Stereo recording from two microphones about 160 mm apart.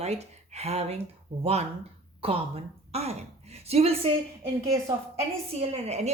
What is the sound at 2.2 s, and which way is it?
A woman's voice, 35° right (ahead or behind).